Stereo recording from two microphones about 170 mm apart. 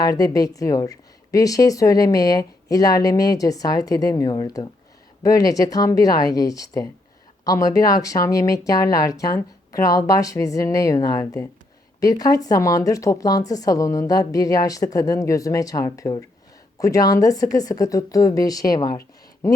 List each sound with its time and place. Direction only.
0.0 s speech: 20° left (ahead or behind)